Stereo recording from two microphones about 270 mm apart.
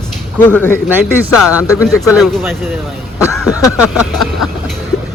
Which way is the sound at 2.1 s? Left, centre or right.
Centre.